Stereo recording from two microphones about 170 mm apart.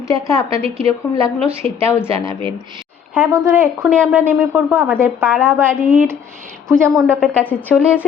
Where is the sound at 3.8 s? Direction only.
5° left (ahead or behind).